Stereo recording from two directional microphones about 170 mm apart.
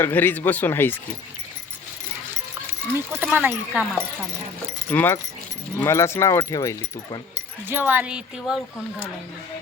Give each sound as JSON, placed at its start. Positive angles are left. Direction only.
{"t": 0.0, "sound": "speech", "side_deg": 10}
{"t": 3.1, "sound": "speech", "side_deg": -10}
{"t": 4.9, "sound": "speech", "side_deg": 10}
{"t": 7.7, "sound": "speech", "side_deg": -10}